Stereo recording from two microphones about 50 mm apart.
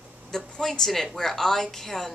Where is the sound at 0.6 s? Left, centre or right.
Centre.